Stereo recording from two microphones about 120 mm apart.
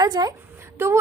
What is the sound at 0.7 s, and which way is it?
Speech, 20° right (ahead or behind).